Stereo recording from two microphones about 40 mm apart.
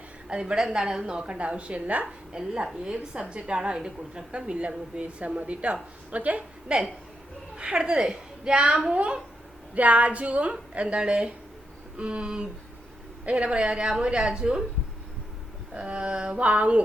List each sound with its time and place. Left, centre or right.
0.3 s a woman's voice: right
2.3 s a woman's voice: centre; by 6.4 s right
6.7 s a woman's voice: right
9.7 s a woman's voice: right
15.7 s a woman's voice: right